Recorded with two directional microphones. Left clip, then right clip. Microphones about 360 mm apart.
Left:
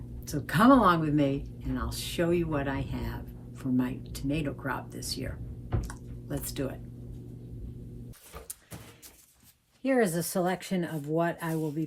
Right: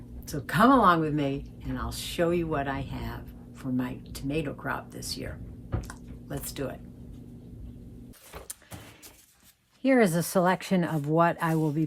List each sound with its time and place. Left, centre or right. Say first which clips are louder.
0.3 s a woman's voice: right 1 dB; centre
5.8 s a sound: even; centre
9.8 s speech: right 3 dB; right